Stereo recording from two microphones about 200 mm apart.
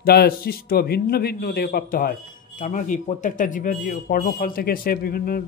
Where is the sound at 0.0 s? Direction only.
50° left (ahead or behind).